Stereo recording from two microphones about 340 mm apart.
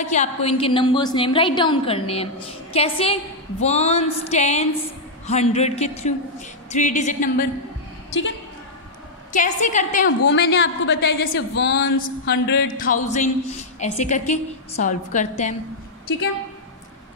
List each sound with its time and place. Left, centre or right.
0.1 s a woman's voice: centre
9.3 s a woman's voice: left
10.2 s a woman's voice: left